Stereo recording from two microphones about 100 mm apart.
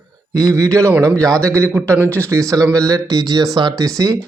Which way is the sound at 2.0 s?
15° left (ahead or behind).